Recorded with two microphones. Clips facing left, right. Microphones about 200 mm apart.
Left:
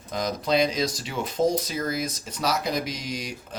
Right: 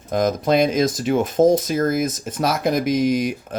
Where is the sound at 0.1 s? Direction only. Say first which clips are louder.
Right 7 dB; 50° right (ahead or behind).